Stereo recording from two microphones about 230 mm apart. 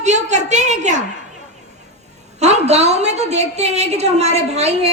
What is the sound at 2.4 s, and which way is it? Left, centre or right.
A woman's voice, right.